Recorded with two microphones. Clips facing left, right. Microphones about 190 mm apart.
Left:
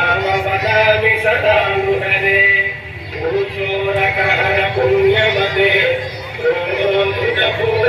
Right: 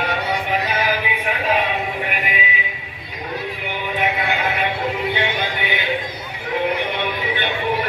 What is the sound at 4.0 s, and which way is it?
Music, 60° left (ahead or behind).